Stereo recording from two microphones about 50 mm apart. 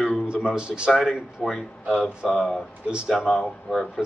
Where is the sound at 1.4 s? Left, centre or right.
Centre.